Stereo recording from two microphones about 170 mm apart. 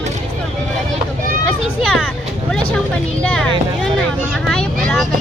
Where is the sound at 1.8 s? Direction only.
Centre (ahead or behind).